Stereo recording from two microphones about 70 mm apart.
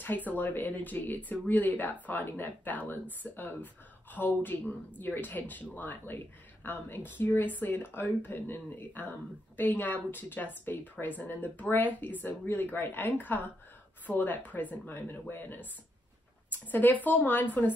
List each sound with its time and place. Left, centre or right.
0.0 s speech: left